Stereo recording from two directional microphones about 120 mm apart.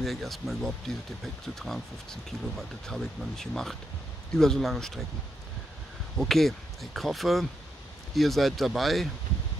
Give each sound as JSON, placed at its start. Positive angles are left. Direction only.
{"t": 0.0, "sound": "speech", "side_deg": 0}
{"t": 6.1, "sound": "speech", "side_deg": 0}